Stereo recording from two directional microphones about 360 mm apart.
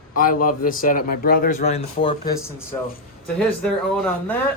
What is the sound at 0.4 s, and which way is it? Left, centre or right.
Speech, left.